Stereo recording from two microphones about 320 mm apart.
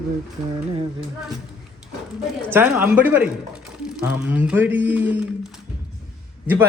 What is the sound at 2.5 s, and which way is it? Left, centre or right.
A man's voice, centre.